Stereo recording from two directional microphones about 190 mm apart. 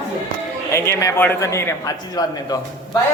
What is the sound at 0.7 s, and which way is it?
A man's voice, 15° left (ahead or behind).